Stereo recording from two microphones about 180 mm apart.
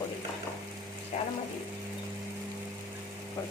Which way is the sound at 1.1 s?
40° left (ahead or behind).